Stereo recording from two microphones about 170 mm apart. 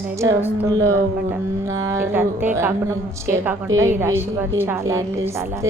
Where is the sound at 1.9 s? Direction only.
15° right (ahead or behind).